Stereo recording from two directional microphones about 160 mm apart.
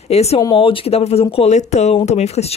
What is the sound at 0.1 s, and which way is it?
Speech, 40° left (ahead or behind).